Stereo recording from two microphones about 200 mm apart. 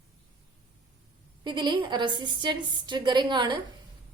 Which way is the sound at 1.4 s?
20° right (ahead or behind).